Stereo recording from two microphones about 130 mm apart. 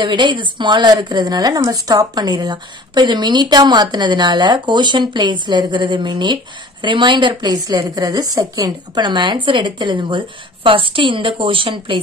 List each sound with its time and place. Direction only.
0.0 s a woman's voice: 35° right (ahead or behind)